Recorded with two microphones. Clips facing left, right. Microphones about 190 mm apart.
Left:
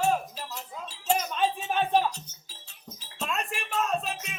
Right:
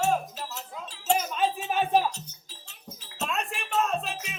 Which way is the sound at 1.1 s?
5° right (ahead or behind).